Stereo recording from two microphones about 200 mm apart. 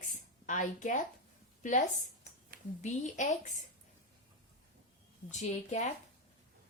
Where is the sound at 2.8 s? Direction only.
35° left (ahead or behind).